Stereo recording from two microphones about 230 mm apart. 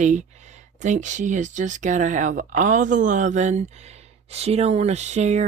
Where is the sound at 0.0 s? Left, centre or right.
Right.